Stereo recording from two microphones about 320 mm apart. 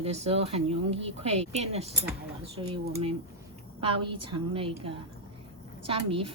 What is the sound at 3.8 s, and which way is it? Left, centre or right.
Speech, centre.